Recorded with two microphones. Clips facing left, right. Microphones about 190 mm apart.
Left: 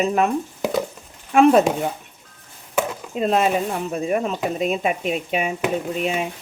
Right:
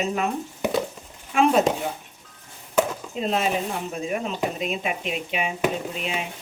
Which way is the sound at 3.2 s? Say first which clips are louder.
Left 5 dB; 50° left (ahead or behind).